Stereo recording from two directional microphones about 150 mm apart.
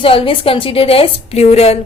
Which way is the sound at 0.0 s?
35° left (ahead or behind).